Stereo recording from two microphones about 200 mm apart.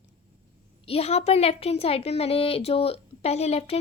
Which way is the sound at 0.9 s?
30° left (ahead or behind).